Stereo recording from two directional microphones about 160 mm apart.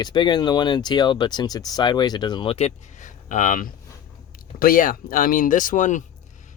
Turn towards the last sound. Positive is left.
turn(degrees=50)  # may be behind; listen again after turning